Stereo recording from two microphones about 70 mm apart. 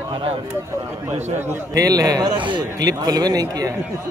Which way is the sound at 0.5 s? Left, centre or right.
Right.